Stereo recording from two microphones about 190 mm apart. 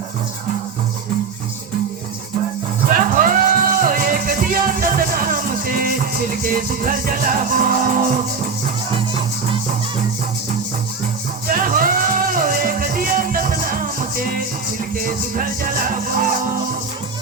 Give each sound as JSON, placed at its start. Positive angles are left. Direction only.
{"t": 2.8, "sound": "music", "side_deg": -45}
{"t": 11.5, "sound": "music", "side_deg": -45}